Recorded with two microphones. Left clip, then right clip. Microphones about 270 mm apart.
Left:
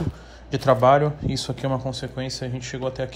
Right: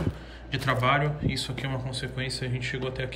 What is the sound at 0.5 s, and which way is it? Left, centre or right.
Speech, centre.